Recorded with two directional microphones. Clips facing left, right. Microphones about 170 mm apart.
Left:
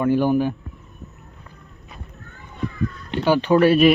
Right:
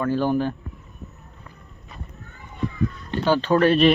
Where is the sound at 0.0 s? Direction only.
15° left (ahead or behind).